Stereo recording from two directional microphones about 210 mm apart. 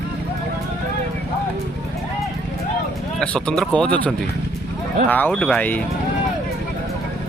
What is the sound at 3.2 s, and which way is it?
Speech, 5° left (ahead or behind).